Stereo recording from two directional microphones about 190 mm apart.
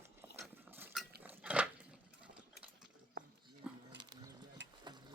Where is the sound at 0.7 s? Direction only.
10° right (ahead or behind).